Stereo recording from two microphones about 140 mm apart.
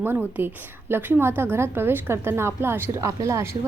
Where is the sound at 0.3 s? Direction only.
15° right (ahead or behind).